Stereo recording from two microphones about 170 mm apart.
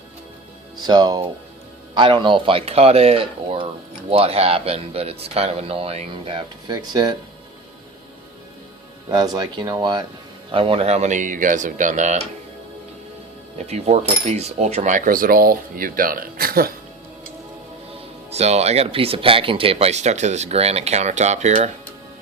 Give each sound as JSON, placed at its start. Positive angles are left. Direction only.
{"t": 0.8, "sound": "speech", "side_deg": -25}
{"t": 9.0, "sound": "speech", "side_deg": -25}
{"t": 13.7, "sound": "cutlery", "side_deg": -40}
{"t": 18.3, "sound": "speech", "side_deg": -40}